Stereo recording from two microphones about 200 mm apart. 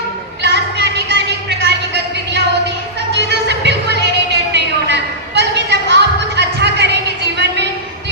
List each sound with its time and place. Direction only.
0.4 s music: 60° right (ahead or behind)
3.1 s music: 60° right (ahead or behind)